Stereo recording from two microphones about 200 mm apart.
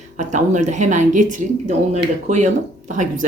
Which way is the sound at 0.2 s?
35° right (ahead or behind).